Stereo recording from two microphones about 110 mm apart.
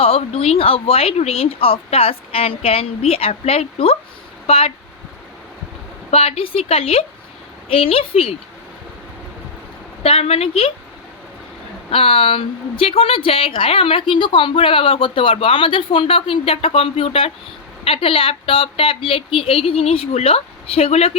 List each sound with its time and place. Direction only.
0.0 s a woman's voice: 65° left (ahead or behind)
6.1 s a woman's voice: 70° left (ahead or behind)
10.0 s a woman's voice: 60° left (ahead or behind)
11.9 s a woman's voice: 60° left (ahead or behind)